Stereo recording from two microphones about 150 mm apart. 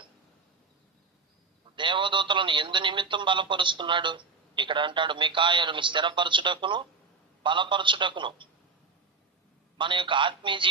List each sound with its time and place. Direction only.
1.7 s speech: 35° right (ahead or behind)
9.7 s speech: 35° right (ahead or behind)